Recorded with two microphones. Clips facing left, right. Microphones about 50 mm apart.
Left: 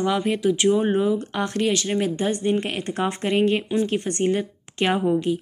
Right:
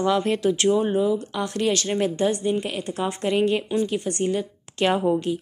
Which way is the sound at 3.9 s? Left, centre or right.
Left.